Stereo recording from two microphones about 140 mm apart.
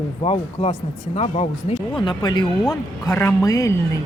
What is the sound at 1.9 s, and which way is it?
Speech, 35° left (ahead or behind).